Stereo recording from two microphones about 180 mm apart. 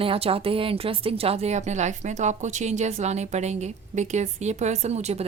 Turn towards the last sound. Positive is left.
turn(degrees=-35)  # may be behind; listen again after turning